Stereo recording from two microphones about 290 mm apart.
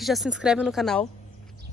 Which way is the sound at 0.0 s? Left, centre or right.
Centre.